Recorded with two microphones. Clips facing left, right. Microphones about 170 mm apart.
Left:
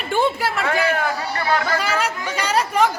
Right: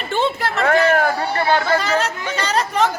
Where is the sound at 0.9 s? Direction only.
55° right (ahead or behind).